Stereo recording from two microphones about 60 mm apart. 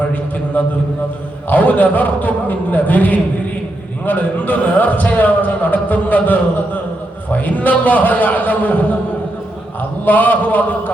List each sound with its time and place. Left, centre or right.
0.0 s a sound: left
1.5 s a man's voice: left
10.1 s a man's voice: left